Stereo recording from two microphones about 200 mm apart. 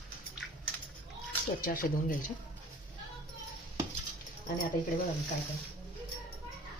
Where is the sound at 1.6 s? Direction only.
45° left (ahead or behind).